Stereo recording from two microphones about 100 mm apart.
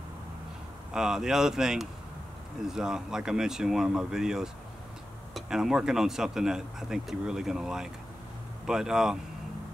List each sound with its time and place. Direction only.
0.9 s speech: 5° right (ahead or behind)